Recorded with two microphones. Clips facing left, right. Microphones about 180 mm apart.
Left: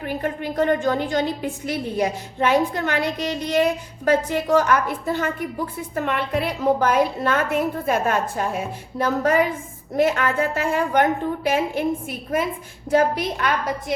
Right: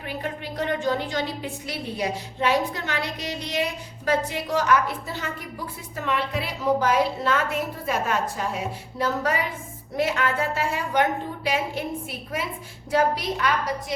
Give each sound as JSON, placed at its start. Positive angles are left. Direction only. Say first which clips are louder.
{"t": 0.0, "sound": "a woman's voice", "louder": "left 6 dB", "side_deg": 45}
{"t": 12.9, "sound": "a woman's voice", "louder": "left 4 dB", "side_deg": 50}